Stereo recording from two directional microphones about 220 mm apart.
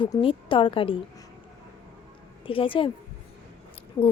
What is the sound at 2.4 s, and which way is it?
Speech, 25° left (ahead or behind).